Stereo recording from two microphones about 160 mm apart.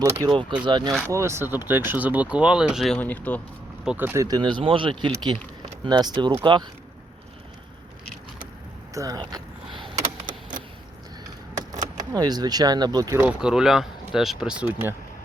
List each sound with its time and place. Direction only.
0.0 s speech: 20° right (ahead or behind)
1.0 s speech: 15° right (ahead or behind); by 3.4 s 10° left (ahead or behind)
3.8 s speech: 10° right (ahead or behind); by 6.7 s 30° right (ahead or behind)
9.0 s speech: 25° right (ahead or behind)
11.8 s speech: 25° right (ahead or behind)
13.2 s speech: 5° right (ahead or behind)